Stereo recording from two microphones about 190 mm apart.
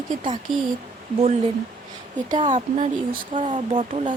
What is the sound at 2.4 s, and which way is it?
Speech, 35° right (ahead or behind).